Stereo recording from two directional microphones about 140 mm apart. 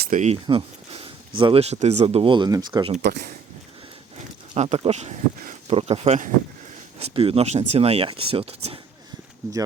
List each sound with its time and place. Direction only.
0.0 s speech: 60° right (ahead or behind)
0.4 s a sound: 40° right (ahead or behind)
1.6 s speech: 50° right (ahead or behind); by 2.9 s 30° right (ahead or behind)
2.9 s speech: 90° right
4.5 s speech: 50° right (ahead or behind)
7.0 s speech: 40° right (ahead or behind)